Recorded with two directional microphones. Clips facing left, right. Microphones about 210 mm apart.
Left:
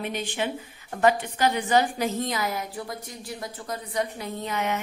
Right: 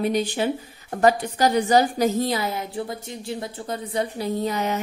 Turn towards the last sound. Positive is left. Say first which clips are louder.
# right 4 dB
turn(degrees=-35)  # may be behind; listen again after turning